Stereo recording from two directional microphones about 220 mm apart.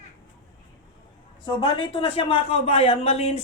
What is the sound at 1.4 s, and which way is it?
Speech, 20° left (ahead or behind).